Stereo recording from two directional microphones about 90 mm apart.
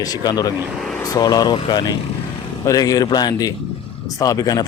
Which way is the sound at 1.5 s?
65° left (ahead or behind).